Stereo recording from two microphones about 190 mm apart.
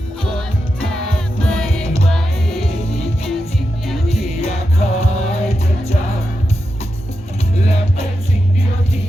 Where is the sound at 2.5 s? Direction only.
30° left (ahead or behind).